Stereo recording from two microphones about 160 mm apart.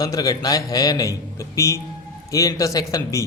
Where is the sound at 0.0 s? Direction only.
20° left (ahead or behind).